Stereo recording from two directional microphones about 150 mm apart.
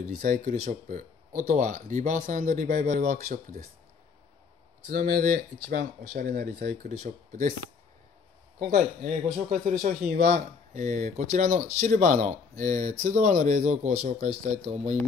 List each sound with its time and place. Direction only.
0.5 s speech: 55° right (ahead or behind)
3.0 s speech: 70° right (ahead or behind)
4.8 s speech: 75° right (ahead or behind); by 7.5 s 50° right (ahead or behind)
8.5 s speech: 65° right (ahead or behind)
10.1 s speech: 80° right
10.7 s speech: 55° right (ahead or behind)